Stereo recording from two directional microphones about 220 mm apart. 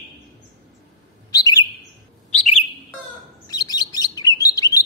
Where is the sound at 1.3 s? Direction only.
15° left (ahead or behind).